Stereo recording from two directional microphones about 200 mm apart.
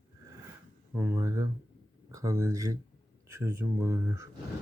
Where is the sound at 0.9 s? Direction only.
10° right (ahead or behind).